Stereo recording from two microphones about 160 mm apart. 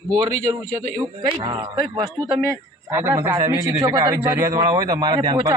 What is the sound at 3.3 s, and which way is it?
A man's voice, 25° right (ahead or behind).